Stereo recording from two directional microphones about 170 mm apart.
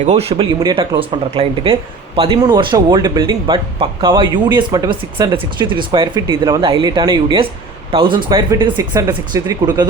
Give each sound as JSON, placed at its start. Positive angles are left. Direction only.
{"t": 0.0, "sound": "speech", "side_deg": -40}